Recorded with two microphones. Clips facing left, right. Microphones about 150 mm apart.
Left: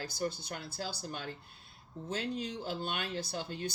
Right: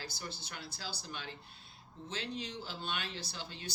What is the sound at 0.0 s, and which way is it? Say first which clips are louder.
Speech: left 9 dB; 50° left (ahead or behind).